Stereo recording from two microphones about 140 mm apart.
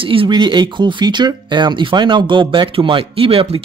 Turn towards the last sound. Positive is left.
turn(degrees=-40)  # may be behind; listen again after turning